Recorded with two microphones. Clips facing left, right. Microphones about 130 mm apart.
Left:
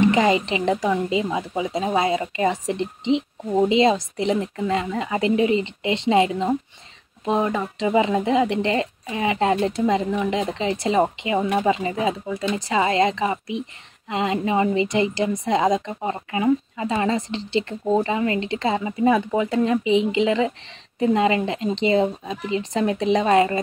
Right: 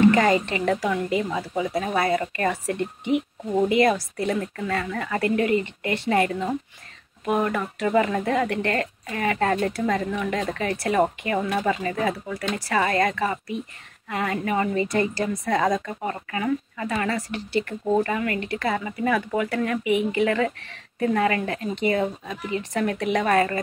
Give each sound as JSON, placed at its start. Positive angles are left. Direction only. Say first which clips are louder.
{"t": 0.0, "sound": "a woman's voice", "louder": "even", "side_deg": 20}